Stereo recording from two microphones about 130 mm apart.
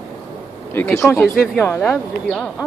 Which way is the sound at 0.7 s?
20° left (ahead or behind).